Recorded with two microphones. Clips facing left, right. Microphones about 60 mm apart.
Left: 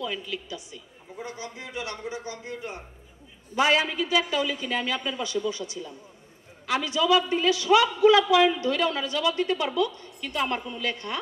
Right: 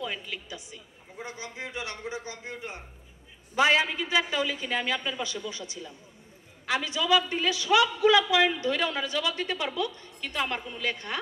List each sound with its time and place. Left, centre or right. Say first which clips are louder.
0.0 s a woman's voice: left 3 dB; right